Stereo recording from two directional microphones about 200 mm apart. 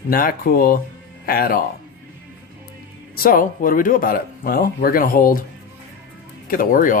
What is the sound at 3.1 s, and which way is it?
Speech, 45° left (ahead or behind).